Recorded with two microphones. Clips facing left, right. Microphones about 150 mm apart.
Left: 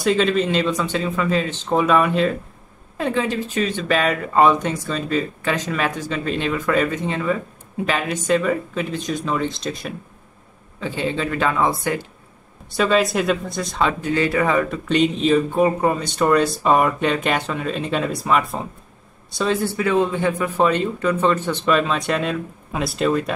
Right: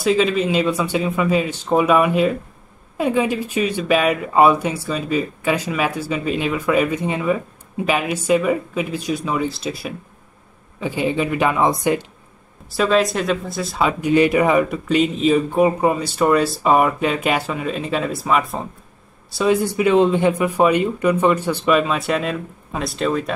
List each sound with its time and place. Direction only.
0.0 s speech: 5° right (ahead or behind)
12.6 s speech: centre (ahead or behind)
19.3 s speech: 10° right (ahead or behind)